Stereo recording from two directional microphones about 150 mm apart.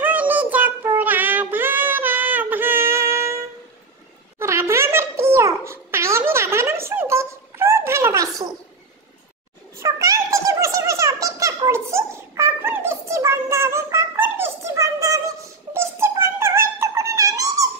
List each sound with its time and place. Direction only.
0.0 s music: 10° right (ahead or behind)
0.9 s child singing: 10° right (ahead or behind)
4.4 s babbling: 20° right (ahead or behind)
9.8 s a sound: 20° right (ahead or behind)